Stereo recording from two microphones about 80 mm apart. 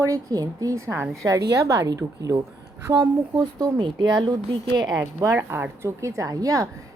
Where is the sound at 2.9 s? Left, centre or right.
Right.